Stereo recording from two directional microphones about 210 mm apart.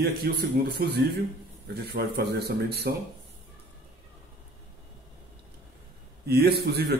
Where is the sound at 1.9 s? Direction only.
50° right (ahead or behind).